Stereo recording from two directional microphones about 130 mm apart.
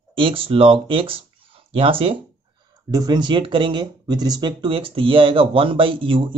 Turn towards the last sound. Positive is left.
turn(degrees=-40)  # may be behind; listen again after turning